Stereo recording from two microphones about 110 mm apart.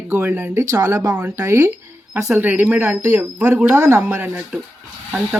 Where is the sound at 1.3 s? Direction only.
25° right (ahead or behind).